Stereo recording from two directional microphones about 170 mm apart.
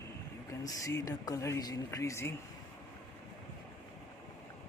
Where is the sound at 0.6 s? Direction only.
20° left (ahead or behind).